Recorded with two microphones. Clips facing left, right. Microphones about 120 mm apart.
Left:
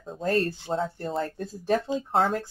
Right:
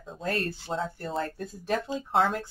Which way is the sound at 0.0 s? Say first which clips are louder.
Left 5 dB; 40° left (ahead or behind).